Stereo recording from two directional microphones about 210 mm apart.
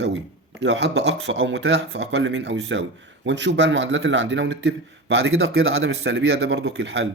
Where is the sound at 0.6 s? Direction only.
55° right (ahead or behind).